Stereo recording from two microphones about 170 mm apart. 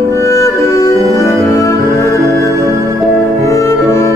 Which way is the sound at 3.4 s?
20° left (ahead or behind).